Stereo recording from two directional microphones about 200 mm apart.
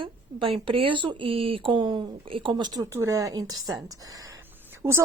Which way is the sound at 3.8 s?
20° right (ahead or behind).